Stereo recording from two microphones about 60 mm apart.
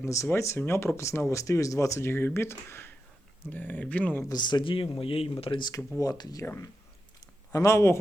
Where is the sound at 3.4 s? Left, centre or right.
Left.